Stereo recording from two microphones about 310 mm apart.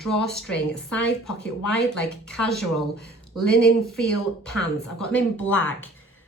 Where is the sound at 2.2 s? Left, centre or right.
Centre.